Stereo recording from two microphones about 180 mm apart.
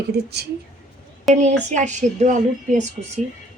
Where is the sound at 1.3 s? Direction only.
40° right (ahead or behind).